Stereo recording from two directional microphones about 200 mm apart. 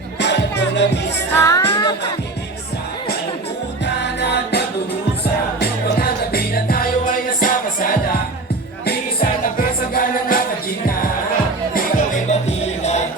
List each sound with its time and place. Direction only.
0.2 s music: 60° left (ahead or behind)
1.3 s music: 15° left (ahead or behind)
3.8 s music: 55° left (ahead or behind)
11.7 s music: 40° left (ahead or behind)